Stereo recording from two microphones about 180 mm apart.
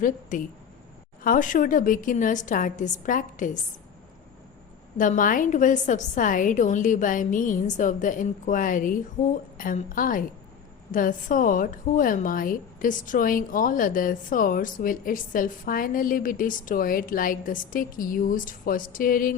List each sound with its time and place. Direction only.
0.0 s a woman's voice: 45° left (ahead or behind)
4.9 s a woman's voice: 45° left (ahead or behind)